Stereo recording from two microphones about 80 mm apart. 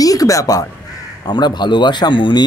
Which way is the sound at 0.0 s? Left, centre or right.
Left.